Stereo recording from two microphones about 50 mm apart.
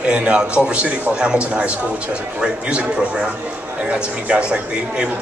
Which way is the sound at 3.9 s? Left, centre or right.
Right.